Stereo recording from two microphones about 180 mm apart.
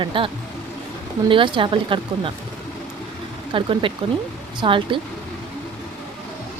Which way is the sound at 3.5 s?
30° right (ahead or behind).